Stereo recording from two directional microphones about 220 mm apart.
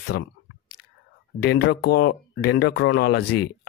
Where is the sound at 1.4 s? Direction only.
50° left (ahead or behind).